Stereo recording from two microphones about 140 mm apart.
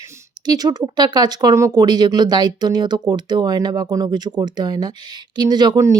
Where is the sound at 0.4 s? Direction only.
30° right (ahead or behind).